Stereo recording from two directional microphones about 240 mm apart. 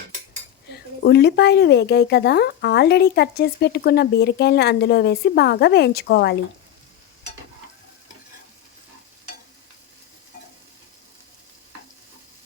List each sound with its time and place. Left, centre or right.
0.7 s a woman's voice: left